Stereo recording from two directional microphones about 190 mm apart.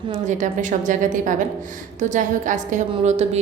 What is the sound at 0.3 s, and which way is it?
A woman's voice, 40° right (ahead or behind).